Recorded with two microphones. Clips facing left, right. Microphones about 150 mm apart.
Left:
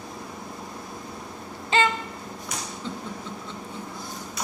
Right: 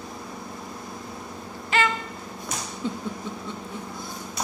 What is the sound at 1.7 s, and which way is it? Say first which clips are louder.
Music: left 2 dB; 25° left (ahead or behind).